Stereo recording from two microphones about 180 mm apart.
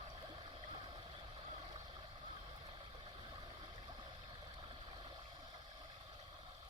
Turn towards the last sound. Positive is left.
turn(degrees=-25)  # may be behind; listen again after turning